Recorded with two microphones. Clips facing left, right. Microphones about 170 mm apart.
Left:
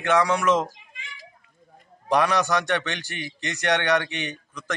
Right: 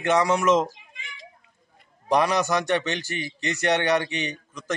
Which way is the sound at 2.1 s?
10° right (ahead or behind).